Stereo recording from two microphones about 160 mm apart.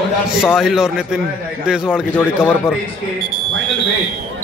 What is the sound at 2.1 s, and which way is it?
Speech, 15° left (ahead or behind).